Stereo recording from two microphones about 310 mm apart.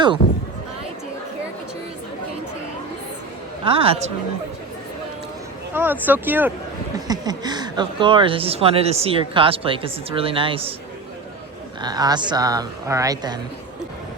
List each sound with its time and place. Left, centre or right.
3.6 s speech: centre
5.7 s speech: centre
11.8 s speech: centre